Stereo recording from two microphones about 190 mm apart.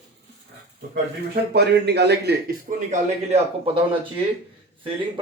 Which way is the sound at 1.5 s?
60° right (ahead or behind).